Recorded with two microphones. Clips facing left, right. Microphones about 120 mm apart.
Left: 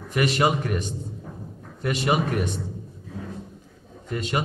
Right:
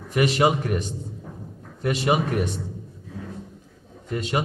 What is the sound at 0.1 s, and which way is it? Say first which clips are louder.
Speech: right 2 dB; 20° right (ahead or behind).